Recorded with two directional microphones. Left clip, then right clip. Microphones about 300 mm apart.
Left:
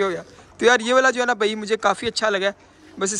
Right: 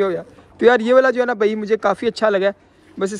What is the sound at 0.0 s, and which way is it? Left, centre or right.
Speech, centre.